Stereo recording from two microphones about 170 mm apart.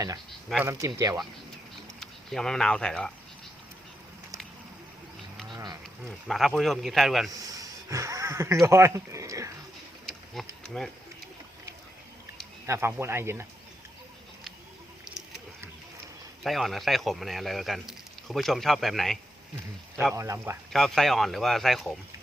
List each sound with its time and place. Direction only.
0.6 s speech: 20° right (ahead or behind)
2.0 s speech: 5° left (ahead or behind)
5.5 s a sound: 25° right (ahead or behind)
6.1 s speech: centre (ahead or behind)
7.3 s speech: 20° right (ahead or behind)
10.6 s speech: 5° left (ahead or behind)
12.6 s speech: 15° right (ahead or behind)
16.4 s speech: centre (ahead or behind)
20.1 s speech: 15° right (ahead or behind)
20.7 s speech: centre (ahead or behind)